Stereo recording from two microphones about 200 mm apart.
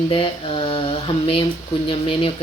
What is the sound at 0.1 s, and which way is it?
Mantra, 25° left (ahead or behind).